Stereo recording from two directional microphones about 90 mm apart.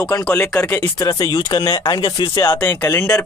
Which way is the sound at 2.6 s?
25° left (ahead or behind).